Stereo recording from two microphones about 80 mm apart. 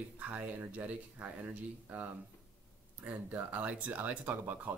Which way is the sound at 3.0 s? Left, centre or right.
Right.